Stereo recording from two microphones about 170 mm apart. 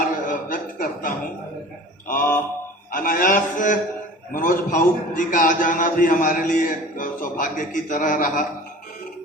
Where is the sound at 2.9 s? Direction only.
55° left (ahead or behind).